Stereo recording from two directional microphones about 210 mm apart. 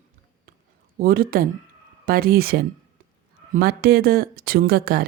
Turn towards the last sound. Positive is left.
turn(degrees=-45)  # may be behind; listen again after turning